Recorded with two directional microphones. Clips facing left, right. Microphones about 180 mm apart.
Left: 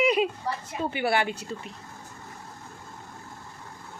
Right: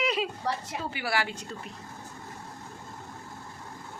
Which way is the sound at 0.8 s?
25° left (ahead or behind).